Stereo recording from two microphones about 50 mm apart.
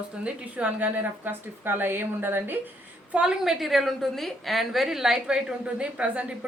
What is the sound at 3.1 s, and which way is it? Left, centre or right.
A woman's voice, centre.